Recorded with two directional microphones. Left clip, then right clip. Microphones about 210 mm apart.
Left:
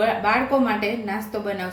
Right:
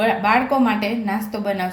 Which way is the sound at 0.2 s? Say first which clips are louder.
Right 3 dB; 35° right (ahead or behind).